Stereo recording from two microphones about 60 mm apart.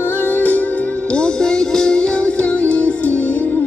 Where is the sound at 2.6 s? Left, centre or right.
Left.